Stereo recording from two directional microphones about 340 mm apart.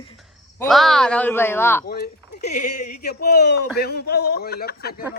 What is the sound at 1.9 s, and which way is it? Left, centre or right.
Speech, left.